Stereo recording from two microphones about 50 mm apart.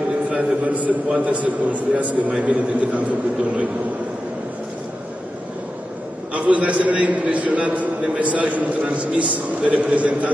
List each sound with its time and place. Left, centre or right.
0.3 s a man's voice: right
6.3 s a man's voice: right